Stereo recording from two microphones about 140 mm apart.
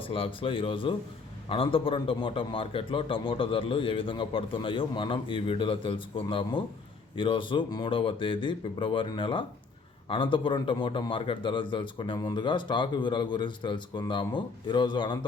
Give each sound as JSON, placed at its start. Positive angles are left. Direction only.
{"t": 0.0, "sound": "a man's voice", "side_deg": 40}